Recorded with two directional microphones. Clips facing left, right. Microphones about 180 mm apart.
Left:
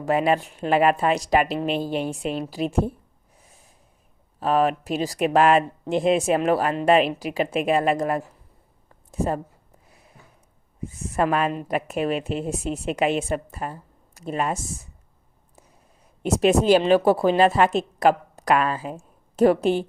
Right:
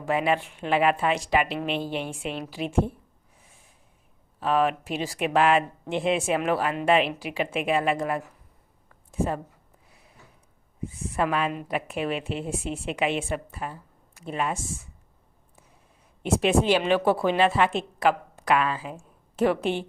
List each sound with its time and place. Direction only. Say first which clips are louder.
0.0 s a woman's voice: left 4 dB; 40° left (ahead or behind)
4.4 s a woman's voice: left 3 dB; 40° left (ahead or behind)
10.8 s a woman's voice: left 4 dB; 45° left (ahead or behind)
16.2 s a woman's voice: left 4 dB; 40° left (ahead or behind)